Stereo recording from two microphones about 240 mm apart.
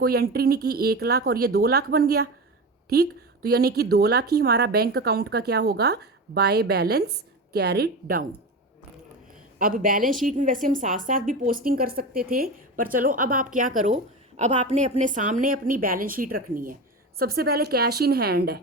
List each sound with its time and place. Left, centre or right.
0.0 s a woman's voice: right
9.6 s a woman's voice: right